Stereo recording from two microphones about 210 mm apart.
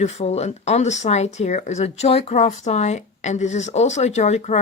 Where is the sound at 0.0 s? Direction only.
30° left (ahead or behind).